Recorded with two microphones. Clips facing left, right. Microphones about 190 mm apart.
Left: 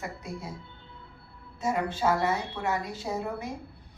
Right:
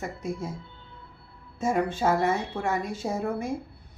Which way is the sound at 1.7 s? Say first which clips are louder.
Right 2 dB; 50° right (ahead or behind).